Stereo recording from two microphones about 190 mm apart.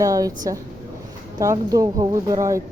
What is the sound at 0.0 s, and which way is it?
Speech, 20° right (ahead or behind).